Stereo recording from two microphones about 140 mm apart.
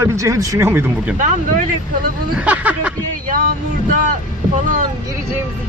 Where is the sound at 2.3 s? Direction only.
10° right (ahead or behind).